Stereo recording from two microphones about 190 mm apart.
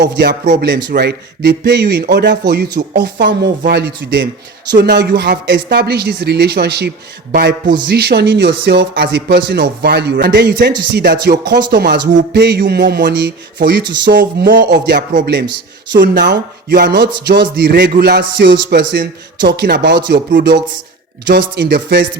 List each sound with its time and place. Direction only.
0.2 s a man's voice: 60° right (ahead or behind)